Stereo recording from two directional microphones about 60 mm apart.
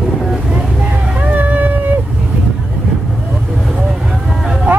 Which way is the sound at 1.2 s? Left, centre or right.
Right.